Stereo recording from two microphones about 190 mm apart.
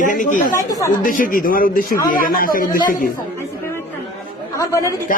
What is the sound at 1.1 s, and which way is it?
A woman's voice, 45° left (ahead or behind).